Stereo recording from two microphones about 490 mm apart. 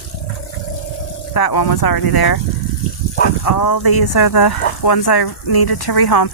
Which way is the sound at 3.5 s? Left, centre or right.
Left.